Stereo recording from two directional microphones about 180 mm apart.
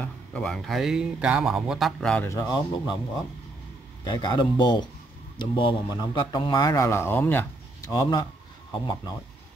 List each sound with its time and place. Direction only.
0.0 s speech: 5° left (ahead or behind)
2.2 s speech: 20° left (ahead or behind)
4.0 s speech: 25° left (ahead or behind)